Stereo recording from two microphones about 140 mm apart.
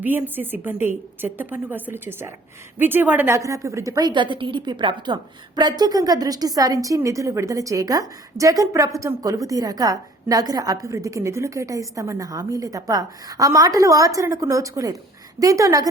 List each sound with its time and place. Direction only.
0.0 s a woman's voice: 15° right (ahead or behind)